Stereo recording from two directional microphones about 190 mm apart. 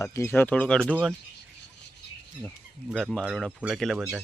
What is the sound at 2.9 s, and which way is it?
Speech, centre (ahead or behind).